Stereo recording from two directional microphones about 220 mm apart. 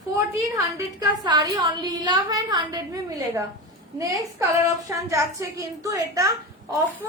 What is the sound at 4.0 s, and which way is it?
A woman's voice, 15° right (ahead or behind).